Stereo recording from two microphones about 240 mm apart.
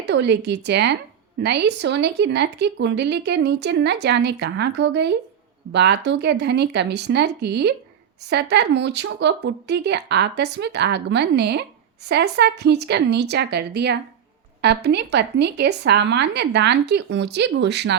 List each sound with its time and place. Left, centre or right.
0.0 s speech: right